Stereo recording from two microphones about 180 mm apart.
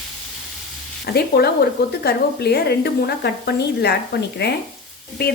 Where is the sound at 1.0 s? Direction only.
60° left (ahead or behind).